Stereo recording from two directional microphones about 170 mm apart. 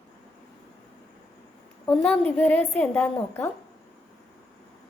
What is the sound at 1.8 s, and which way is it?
A woman's voice, 5° left (ahead or behind).